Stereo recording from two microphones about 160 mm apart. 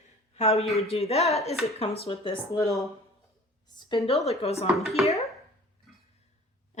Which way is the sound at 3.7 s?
30° left (ahead or behind).